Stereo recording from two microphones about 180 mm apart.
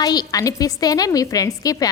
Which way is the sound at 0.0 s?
20° left (ahead or behind).